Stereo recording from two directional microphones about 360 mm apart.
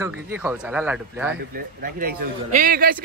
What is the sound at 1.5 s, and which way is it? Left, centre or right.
A man's voice, right.